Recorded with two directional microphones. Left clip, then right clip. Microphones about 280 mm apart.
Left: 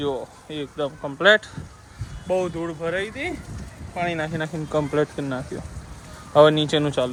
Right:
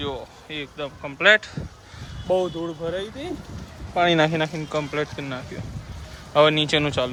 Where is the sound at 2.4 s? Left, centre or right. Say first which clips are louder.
Left 1 dB; centre.